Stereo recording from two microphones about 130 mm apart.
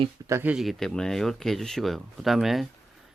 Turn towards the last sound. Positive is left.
turn(degrees=0)  # may be behind; listen again after turning